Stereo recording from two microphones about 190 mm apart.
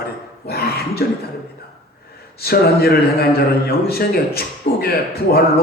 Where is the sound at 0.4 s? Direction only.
55° left (ahead or behind).